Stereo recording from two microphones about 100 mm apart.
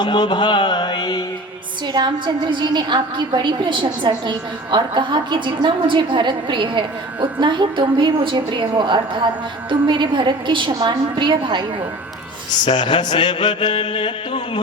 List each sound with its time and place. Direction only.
0.0 s mantra: 50° left (ahead or behind)
1.9 s a woman's voice: 50° right (ahead or behind)
12.6 s mantra: 50° left (ahead or behind)